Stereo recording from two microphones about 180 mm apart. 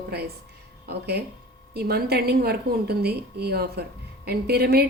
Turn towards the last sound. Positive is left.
turn(degrees=-60)  # may be behind; listen again after turning